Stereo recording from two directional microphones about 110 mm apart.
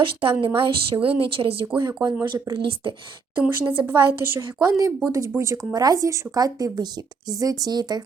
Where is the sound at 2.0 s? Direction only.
35° right (ahead or behind).